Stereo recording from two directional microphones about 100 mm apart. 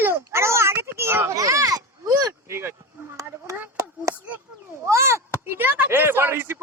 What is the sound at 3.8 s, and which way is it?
Chop, 30° right (ahead or behind).